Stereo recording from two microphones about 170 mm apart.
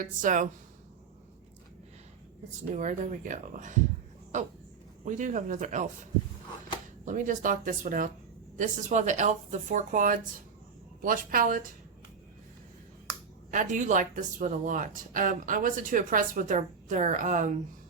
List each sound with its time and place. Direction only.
0.0 s speech: 50° right (ahead or behind)
2.7 s speech: 45° right (ahead or behind)
5.0 s speech: 45° right (ahead or behind)
7.0 s speech: 50° right (ahead or behind)
13.5 s speech: 50° right (ahead or behind)